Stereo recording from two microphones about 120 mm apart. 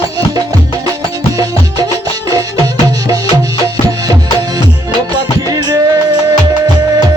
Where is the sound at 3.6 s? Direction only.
35° right (ahead or behind).